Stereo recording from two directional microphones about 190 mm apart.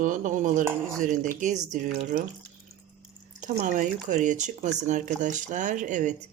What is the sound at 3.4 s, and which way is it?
Speech, 40° right (ahead or behind).